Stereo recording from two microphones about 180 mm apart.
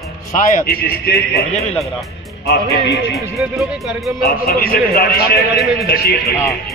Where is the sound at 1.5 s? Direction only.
40° left (ahead or behind).